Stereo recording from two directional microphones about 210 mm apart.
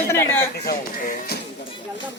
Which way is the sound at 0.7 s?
45° left (ahead or behind).